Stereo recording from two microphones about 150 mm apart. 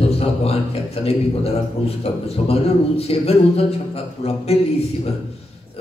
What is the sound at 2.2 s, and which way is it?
A man's voice, 40° left (ahead or behind).